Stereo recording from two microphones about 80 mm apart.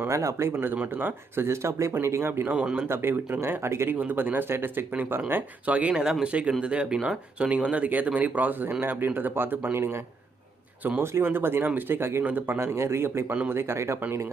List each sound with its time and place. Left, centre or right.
0.1 s speech: right
11.0 s speech: right
13.3 s speech: right
13.6 s speech: right